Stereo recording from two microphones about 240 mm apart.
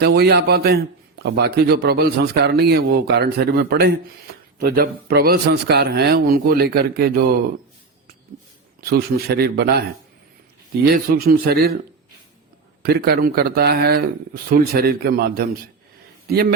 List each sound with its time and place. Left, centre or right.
0.0 s a man's voice: right
8.8 s a man's voice: right
10.9 s a man's voice: right
12.8 s a man's voice: right